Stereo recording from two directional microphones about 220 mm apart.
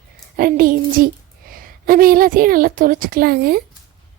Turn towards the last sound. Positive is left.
turn(degrees=-45)  # may be behind; listen again after turning